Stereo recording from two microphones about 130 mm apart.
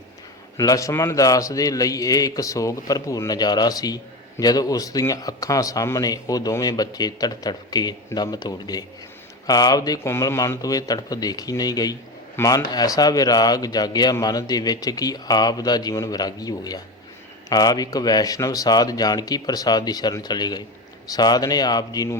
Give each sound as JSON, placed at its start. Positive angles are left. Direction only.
{"t": 0.5, "sound": "a man's voice", "side_deg": 25}